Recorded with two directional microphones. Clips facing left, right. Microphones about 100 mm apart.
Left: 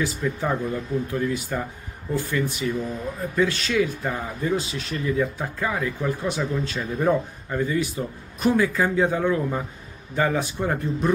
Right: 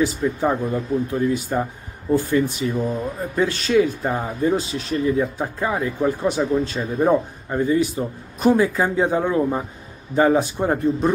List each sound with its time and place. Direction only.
0.0 s speech: 25° right (ahead or behind)